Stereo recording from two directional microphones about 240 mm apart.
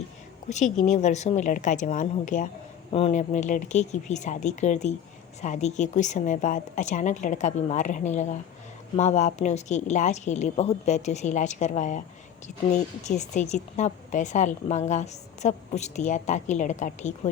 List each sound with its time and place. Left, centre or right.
0.5 s a woman's voice: left